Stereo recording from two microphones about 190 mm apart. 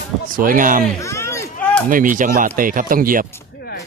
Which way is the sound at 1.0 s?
15° left (ahead or behind).